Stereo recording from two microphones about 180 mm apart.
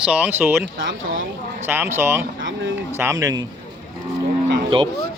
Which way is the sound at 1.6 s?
10° right (ahead or behind).